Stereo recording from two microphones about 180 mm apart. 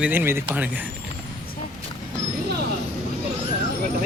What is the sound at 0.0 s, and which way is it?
Speech, 10° right (ahead or behind).